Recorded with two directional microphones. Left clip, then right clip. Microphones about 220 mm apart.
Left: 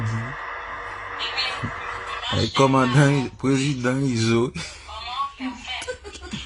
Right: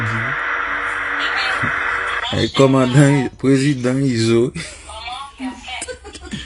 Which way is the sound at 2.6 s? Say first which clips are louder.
Right 4 dB; 5° left (ahead or behind).